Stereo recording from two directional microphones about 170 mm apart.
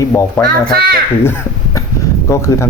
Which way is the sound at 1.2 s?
15° left (ahead or behind).